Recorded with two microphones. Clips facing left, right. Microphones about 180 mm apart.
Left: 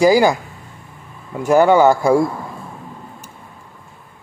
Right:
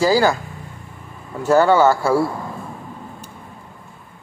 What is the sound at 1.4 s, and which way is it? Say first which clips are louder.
Speech: left 2 dB; 15° left (ahead or behind).